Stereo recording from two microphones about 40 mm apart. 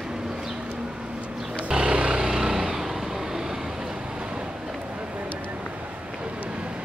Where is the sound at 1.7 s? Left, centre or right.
Right.